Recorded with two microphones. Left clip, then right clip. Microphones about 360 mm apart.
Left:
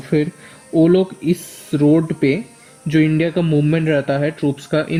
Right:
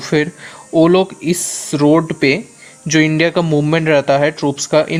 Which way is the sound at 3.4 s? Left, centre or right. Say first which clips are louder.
Right 3 dB; right.